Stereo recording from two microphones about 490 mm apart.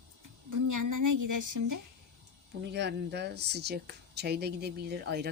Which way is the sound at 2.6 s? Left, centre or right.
Right.